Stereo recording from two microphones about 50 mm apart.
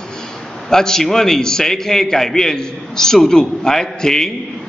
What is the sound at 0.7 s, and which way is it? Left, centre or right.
A man's voice, centre.